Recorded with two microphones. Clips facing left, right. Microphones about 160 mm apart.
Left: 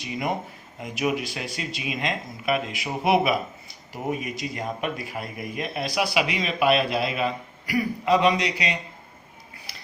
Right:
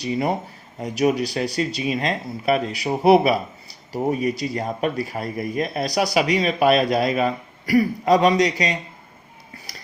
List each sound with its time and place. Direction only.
0.0 s speech: 35° right (ahead or behind)